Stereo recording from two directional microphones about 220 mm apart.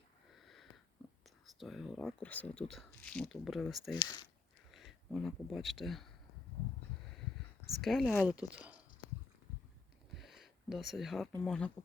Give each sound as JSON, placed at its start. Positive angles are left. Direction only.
{"t": 0.4, "sound": "sniff", "side_deg": 0}
{"t": 1.5, "sound": "speech", "side_deg": 0}
{"t": 3.9, "sound": "speech", "side_deg": 15}
{"t": 4.7, "sound": "speech", "side_deg": 0}
{"t": 7.8, "sound": "speech", "side_deg": 0}
{"t": 10.2, "sound": "a sound", "side_deg": 0}
{"t": 11.3, "sound": "speech", "side_deg": 5}